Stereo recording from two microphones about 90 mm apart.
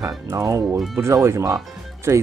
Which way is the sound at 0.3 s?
35° right (ahead or behind).